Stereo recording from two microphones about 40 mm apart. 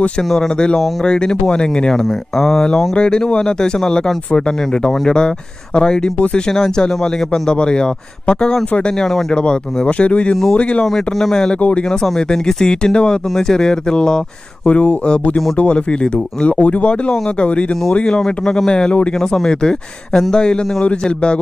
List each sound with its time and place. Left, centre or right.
1.0 s speech: left
2.3 s speech: centre
2.9 s speech: left
10.9 s speech: centre
14.6 s speech: left
16.5 s speech: left
18.2 s speech: centre